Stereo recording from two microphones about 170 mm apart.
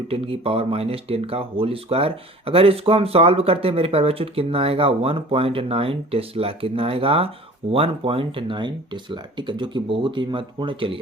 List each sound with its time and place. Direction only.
0.1 s speech: 35° right (ahead or behind)